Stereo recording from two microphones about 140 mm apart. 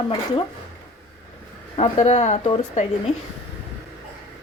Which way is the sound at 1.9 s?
55° left (ahead or behind).